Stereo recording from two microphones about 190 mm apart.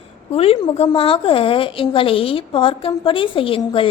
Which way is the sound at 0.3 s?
30° left (ahead or behind).